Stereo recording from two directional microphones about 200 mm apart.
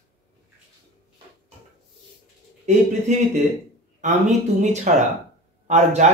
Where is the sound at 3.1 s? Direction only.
35° right (ahead or behind).